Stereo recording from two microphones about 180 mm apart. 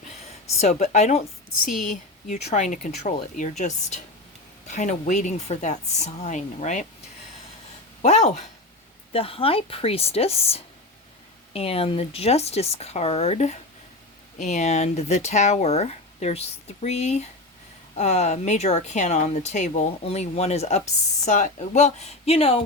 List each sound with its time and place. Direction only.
0.6 s speech: 40° left (ahead or behind)
2.3 s speech: 40° left (ahead or behind)
8.0 s speech: 35° left (ahead or behind)